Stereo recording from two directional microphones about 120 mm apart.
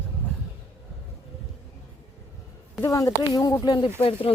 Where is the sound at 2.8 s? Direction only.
30° left (ahead or behind).